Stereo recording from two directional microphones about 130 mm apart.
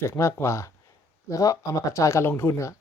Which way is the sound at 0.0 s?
20° left (ahead or behind).